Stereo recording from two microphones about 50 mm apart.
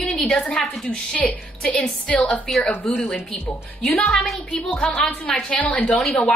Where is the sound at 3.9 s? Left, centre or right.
Left.